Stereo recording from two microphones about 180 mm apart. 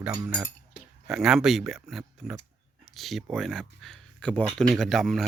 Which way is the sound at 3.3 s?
Centre (ahead or behind).